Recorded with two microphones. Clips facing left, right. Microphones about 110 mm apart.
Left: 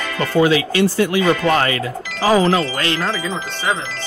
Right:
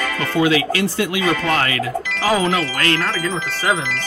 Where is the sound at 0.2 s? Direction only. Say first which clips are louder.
Left 3 dB; 35° left (ahead or behind).